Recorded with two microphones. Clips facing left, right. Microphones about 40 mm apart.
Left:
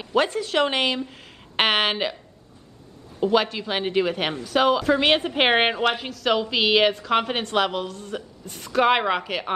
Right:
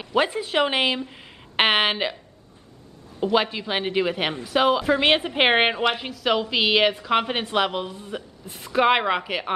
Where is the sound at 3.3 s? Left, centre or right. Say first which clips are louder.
Even; centre.